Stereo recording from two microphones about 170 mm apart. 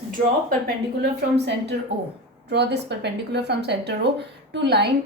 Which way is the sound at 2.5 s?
80° right.